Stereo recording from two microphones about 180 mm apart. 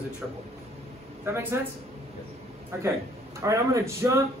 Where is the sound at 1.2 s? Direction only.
15° right (ahead or behind).